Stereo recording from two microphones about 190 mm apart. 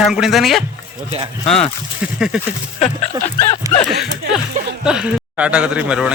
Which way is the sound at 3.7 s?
20° right (ahead or behind).